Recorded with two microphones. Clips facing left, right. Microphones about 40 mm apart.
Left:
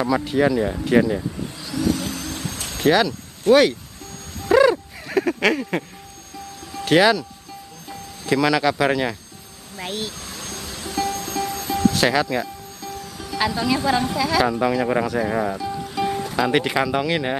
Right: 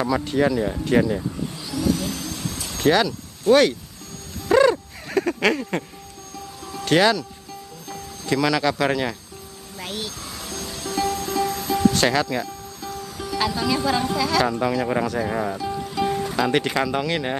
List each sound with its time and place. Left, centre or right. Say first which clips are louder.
0.0 s speech: left 1 dB; centre
2.0 s vehicle: even; left
2.8 s speech: left 1 dB; centre
3.5 s speech: left 1 dB; left
4.5 s a sound: left 1 dB; centre
6.7 s speech: left 2 dB; centre
10.7 s music: right 1 dB; centre
11.2 s music: right 2 dB; centre
11.9 s music: left 1 dB; centre
13.3 s speech: left 1 dB; centre